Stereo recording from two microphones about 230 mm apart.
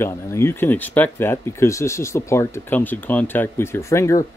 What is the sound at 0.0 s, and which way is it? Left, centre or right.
Speech, centre.